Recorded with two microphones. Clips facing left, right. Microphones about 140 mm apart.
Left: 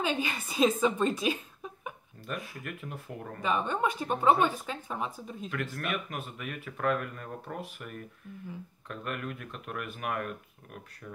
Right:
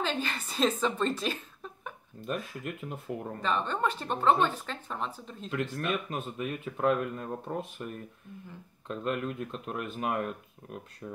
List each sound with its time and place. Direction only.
0.0 s a woman's voice: 10° left (ahead or behind)
2.2 s speech: 20° right (ahead or behind)
3.4 s speech: 10° left (ahead or behind)
5.5 s speech: 25° right (ahead or behind)